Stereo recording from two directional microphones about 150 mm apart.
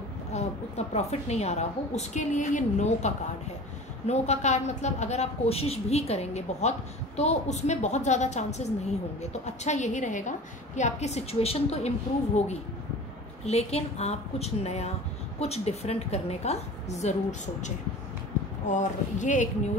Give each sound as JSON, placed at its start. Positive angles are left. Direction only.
{"t": 0.3, "sound": "a woman's voice", "side_deg": 45}
{"t": 4.1, "sound": "a woman's voice", "side_deg": 50}
{"t": 13.5, "sound": "a woman's voice", "side_deg": 45}